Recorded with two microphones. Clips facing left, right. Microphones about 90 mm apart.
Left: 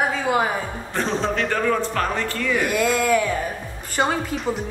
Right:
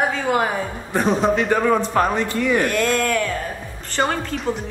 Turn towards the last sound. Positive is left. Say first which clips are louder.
# even
turn(degrees=0)  # may be behind; listen again after turning